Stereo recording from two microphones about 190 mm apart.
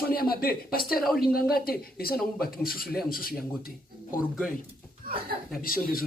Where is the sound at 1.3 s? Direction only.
50° left (ahead or behind).